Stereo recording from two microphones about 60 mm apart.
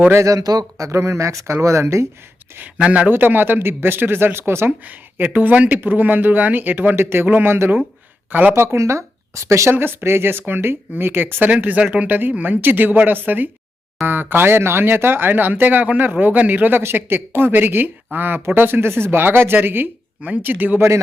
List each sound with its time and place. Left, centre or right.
0.1 s speech: right
0.9 s speech: right
2.7 s speech: right
3.1 s speech: right
4.9 s speech: right
8.5 s speech: right
9.7 s speech: right
16.8 s speech: right